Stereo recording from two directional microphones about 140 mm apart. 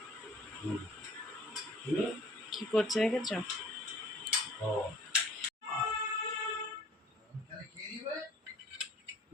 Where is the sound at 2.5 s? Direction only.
Centre (ahead or behind).